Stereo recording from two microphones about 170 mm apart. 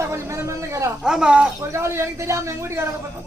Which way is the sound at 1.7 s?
15° right (ahead or behind).